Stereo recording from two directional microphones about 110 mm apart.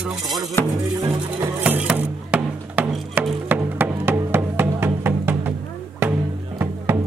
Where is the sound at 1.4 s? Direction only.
15° right (ahead or behind).